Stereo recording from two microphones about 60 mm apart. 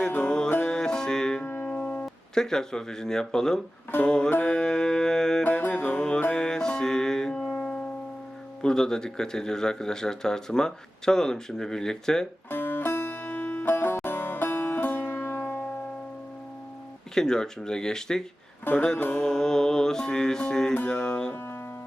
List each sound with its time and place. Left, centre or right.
0.2 s music: centre
1.4 s music: left
2.3 s speech: centre
3.9 s music: left
4.5 s music: centre
5.4 s music: left
6.0 s music: centre
8.6 s speech: centre
12.5 s music: left
17.2 s speech: centre
18.6 s music: left
19.2 s speech: centre
20.9 s music: centre